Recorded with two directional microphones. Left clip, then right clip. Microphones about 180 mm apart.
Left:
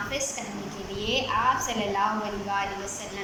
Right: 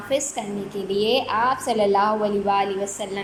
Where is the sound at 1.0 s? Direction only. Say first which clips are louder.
Right 5 dB; 45° right (ahead or behind).